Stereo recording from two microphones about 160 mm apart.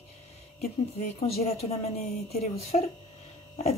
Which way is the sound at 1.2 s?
40° left (ahead or behind).